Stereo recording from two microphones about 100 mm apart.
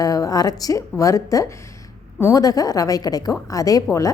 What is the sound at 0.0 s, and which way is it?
A woman's voice, 35° left (ahead or behind).